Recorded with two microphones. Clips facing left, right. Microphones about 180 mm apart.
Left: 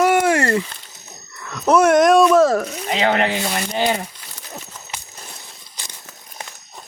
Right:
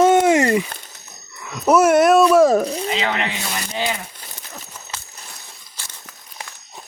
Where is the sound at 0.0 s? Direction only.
20° right (ahead or behind).